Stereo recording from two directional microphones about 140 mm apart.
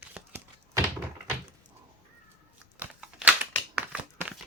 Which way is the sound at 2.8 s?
10° right (ahead or behind).